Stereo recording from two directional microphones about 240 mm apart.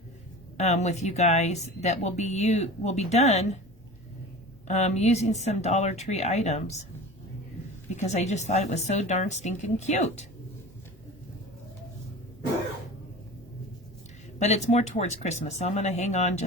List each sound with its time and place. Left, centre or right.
0.5 s speech: left
4.7 s speech: left
7.9 s speech: left
14.3 s speech: left